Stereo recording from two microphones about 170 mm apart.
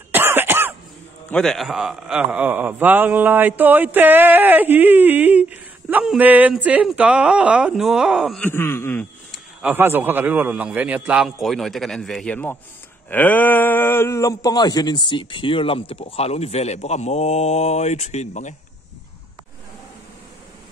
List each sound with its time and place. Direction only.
0.1 s cough: 10° right (ahead or behind)
1.3 s a man's voice: centre (ahead or behind)
8.5 s groan: 15° left (ahead or behind)
9.6 s a man's voice: 10° right (ahead or behind); by 18.5 s 45° left (ahead or behind)